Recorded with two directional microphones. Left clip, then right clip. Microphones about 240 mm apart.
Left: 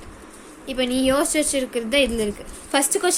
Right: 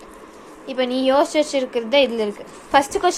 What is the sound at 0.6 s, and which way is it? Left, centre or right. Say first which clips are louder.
A woman's voice: right 2 dB; left.